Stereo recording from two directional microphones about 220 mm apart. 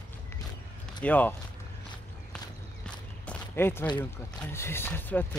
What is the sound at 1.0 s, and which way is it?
Speech, 5° left (ahead or behind).